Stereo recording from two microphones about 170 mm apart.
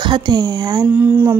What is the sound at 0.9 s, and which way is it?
Speech, 10° right (ahead or behind).